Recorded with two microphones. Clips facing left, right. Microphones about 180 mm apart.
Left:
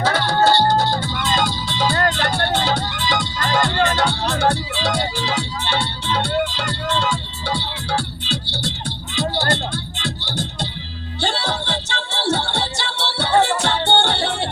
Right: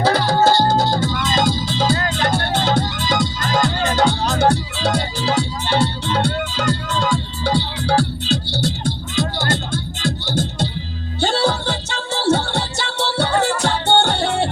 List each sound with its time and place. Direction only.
0.0 s music: 35° right (ahead or behind)